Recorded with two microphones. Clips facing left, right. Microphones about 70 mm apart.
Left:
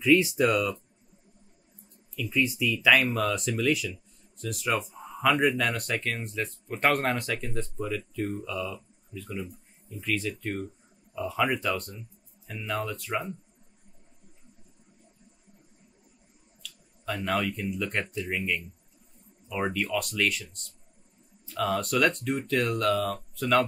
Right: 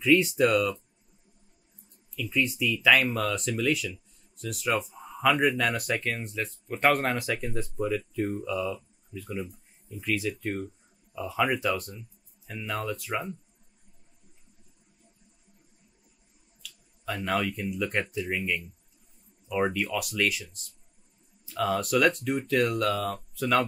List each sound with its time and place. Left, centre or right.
0.0 s speech: centre
2.1 s speech: centre
16.6 s speech: centre